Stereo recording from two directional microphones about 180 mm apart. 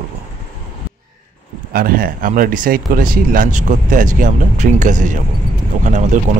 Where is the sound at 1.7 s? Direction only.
55° right (ahead or behind).